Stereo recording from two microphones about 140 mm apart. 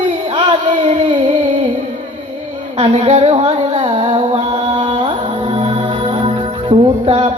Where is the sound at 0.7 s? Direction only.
45° right (ahead or behind).